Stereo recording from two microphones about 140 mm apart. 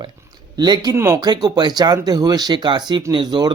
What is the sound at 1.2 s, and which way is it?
Speech, 30° right (ahead or behind).